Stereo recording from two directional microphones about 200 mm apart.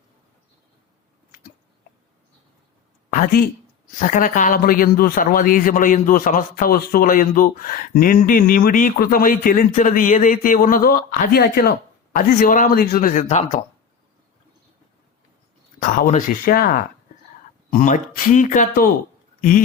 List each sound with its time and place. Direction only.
3.1 s speech: 45° left (ahead or behind)
15.8 s speech: 40° left (ahead or behind)
17.7 s speech: 40° left (ahead or behind)